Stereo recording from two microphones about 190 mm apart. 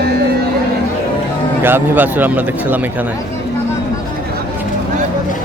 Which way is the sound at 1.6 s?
10° right (ahead or behind).